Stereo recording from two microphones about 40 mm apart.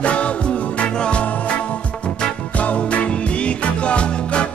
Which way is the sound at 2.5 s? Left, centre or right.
Left.